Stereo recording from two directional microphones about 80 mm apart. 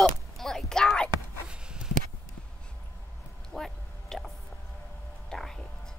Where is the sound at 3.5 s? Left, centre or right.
Centre.